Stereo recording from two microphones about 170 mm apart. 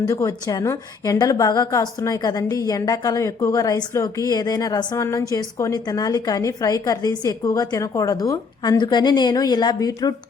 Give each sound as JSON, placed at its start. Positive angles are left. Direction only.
{"t": 0.1, "sound": "a woman's voice", "side_deg": 20}